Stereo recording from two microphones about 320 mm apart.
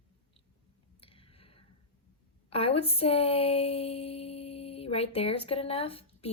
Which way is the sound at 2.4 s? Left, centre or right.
Centre.